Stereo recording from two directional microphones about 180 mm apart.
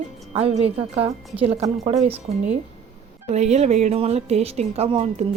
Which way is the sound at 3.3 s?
40° right (ahead or behind).